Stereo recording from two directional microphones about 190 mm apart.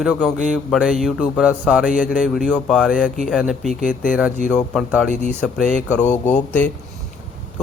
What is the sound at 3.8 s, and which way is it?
Speech, 45° left (ahead or behind).